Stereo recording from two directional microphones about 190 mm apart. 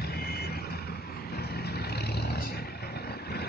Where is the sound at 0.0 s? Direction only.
55° left (ahead or behind).